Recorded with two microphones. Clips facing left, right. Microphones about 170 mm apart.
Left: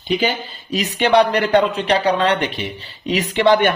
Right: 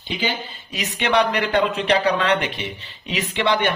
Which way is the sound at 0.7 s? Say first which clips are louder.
Left 6 dB; 35° left (ahead or behind).